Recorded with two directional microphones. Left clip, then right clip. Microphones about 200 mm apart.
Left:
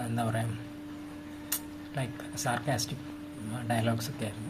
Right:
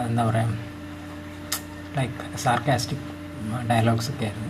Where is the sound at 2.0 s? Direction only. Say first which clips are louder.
Right 7 dB; 5° left (ahead or behind).